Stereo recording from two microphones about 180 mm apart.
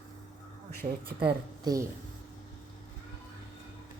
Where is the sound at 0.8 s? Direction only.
35° right (ahead or behind).